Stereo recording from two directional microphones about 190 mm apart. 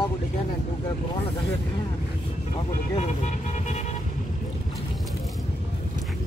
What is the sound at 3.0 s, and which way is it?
Speech, 40° left (ahead or behind).